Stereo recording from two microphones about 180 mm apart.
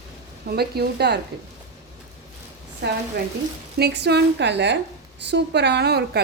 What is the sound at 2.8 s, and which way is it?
A woman's voice, 70° right (ahead or behind).